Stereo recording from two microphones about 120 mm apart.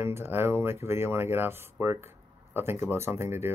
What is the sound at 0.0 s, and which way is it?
Speech, 20° right (ahead or behind).